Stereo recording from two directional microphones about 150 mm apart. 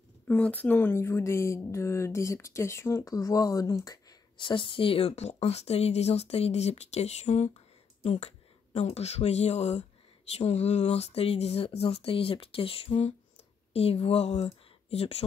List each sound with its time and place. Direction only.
0.3 s speech: 10° left (ahead or behind); by 15.2 s 40° left (ahead or behind)